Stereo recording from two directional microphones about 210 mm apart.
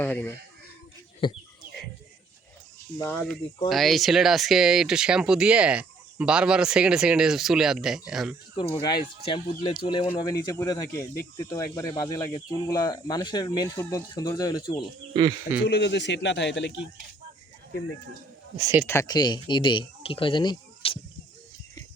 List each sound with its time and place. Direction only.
0.0 s speech: 10° left (ahead or behind)
1.2 s speech: 25° left (ahead or behind)
3.0 s speech: 10° left (ahead or behind)
8.7 s speech: 20° left (ahead or behind)
15.1 s speech: 20° right (ahead or behind)
15.6 s a man's voice: 55° left (ahead or behind)
18.5 s speech: 15° right (ahead or behind)
18.9 s speech: 15° left (ahead or behind)